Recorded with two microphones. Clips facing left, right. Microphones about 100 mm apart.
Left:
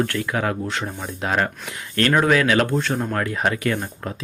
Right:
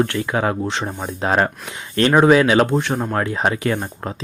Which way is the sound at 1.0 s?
35° right (ahead or behind).